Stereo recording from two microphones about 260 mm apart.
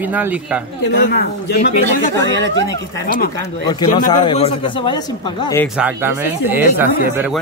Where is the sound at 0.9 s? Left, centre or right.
Left.